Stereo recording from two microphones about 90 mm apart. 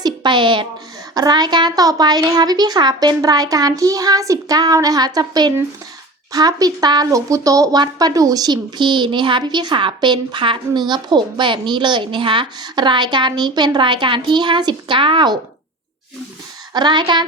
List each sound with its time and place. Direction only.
0.0 s speech: 55° right (ahead or behind)
1.1 s speech: 50° right (ahead or behind)
16.7 s speech: 55° right (ahead or behind)